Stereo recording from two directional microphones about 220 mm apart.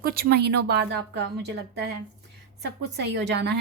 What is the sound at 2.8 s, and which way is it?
Speech, 50° right (ahead or behind).